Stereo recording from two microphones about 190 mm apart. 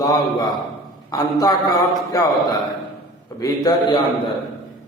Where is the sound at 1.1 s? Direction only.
20° left (ahead or behind).